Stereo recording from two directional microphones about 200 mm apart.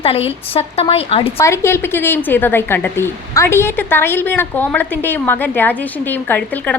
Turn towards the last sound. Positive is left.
turn(degrees=10)  # may be behind; listen again after turning